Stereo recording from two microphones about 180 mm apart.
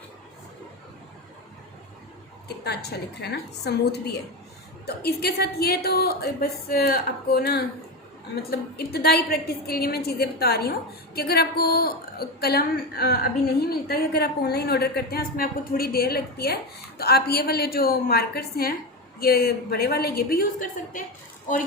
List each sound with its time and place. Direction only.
2.6 s a woman's voice: 65° left (ahead or behind)